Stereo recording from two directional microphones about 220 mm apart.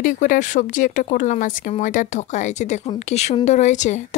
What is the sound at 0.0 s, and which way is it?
Speech, 35° left (ahead or behind).